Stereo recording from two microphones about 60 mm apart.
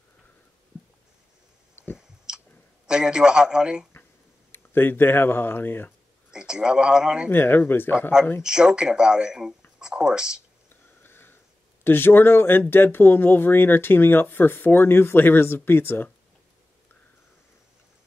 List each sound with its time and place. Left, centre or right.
2.0 s chewing: centre
2.9 s speech: centre
4.5 s speech: left
6.3 s speech: centre
7.2 s speech: left
8.4 s speech: centre
9.8 s a sound: centre
10.7 s a sound: left
11.8 s speech: left